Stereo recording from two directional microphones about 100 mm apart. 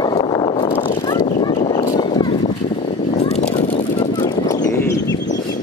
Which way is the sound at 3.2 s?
90° left.